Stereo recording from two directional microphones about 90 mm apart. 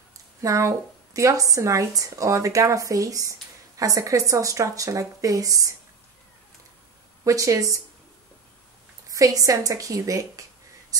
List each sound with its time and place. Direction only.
0.4 s a woman's voice: 35° right (ahead or behind)
7.2 s a woman's voice: 40° right (ahead or behind)
9.1 s a woman's voice: 40° right (ahead or behind)